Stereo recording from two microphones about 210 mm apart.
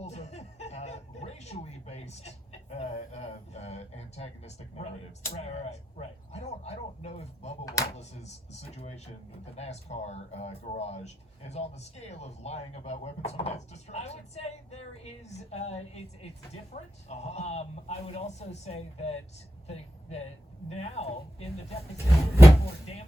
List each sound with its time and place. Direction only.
0.0 s chuckle: 30° left (ahead or behind)
5.3 s speech: 30° left (ahead or behind)